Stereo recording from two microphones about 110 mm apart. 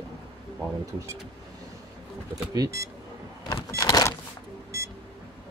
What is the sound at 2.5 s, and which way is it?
Speech, 30° right (ahead or behind).